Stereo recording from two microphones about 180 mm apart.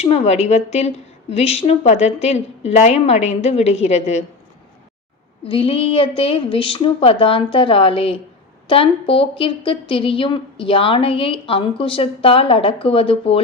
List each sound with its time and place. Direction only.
0.0 s a woman's voice: 35° left (ahead or behind)
5.5 s a woman's voice: 30° left (ahead or behind)